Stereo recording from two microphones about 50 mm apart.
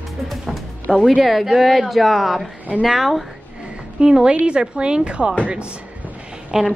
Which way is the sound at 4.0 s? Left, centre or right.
Centre.